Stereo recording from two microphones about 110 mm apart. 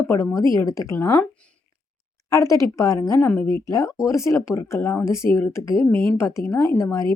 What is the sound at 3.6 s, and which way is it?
Speech, 30° left (ahead or behind).